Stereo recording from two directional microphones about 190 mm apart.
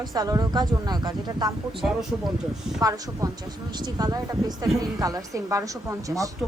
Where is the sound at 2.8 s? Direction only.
20° right (ahead or behind).